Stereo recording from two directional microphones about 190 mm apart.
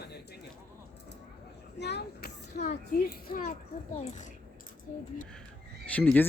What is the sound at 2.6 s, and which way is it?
Children playing, 50° left (ahead or behind).